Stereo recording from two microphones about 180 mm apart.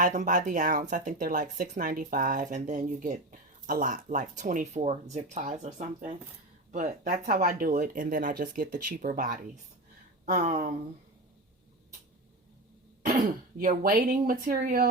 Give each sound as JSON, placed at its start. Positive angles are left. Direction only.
{"t": 0.0, "sound": "speech", "side_deg": -45}
{"t": 13.1, "sound": "speech", "side_deg": -50}